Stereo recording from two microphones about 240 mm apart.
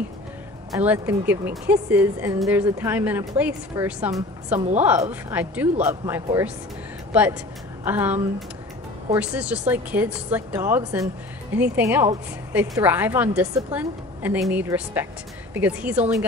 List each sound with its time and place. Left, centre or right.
0.7 s a woman's voice: centre
4.6 s a woman's voice: right
5.3 s a woman's voice: centre